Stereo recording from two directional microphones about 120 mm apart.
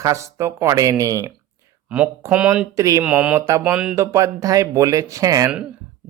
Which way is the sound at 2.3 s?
10° right (ahead or behind).